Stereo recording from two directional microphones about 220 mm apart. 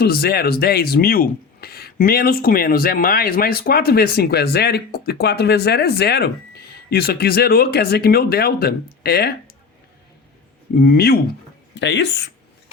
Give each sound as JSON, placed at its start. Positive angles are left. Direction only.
{"t": 0.0, "sound": "speech", "side_deg": 45}
{"t": 10.8, "sound": "speech", "side_deg": 45}